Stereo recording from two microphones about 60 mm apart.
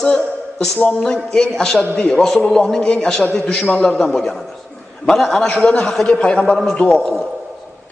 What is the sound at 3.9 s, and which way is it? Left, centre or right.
A man's voice, centre.